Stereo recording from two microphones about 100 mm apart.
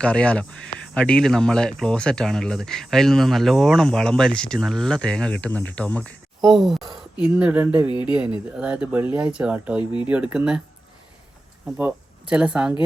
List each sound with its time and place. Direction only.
0.0 s speech: 10° left (ahead or behind)
6.4 s speech: centre (ahead or behind)
7.3 s speech: 15° right (ahead or behind)
11.8 s speech: 15° right (ahead or behind)